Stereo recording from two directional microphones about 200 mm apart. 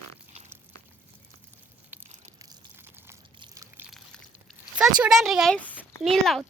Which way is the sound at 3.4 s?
15° right (ahead or behind).